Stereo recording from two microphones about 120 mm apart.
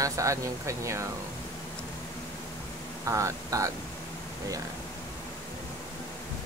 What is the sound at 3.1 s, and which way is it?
Speech, 25° right (ahead or behind).